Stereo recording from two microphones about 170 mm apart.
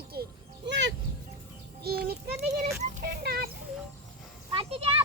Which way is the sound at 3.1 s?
65° right (ahead or behind).